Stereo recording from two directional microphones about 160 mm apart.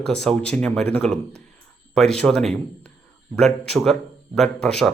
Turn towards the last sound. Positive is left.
turn(degrees=5)  # may be behind; listen again after turning